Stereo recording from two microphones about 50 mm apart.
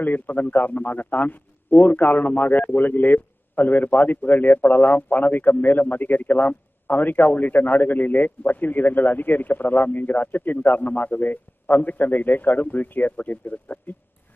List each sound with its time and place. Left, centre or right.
0.0 s a man's voice: left